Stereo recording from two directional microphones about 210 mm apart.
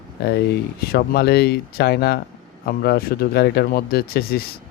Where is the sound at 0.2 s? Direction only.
50° left (ahead or behind).